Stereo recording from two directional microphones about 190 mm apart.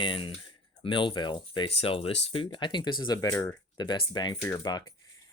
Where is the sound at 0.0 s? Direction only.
25° left (ahead or behind).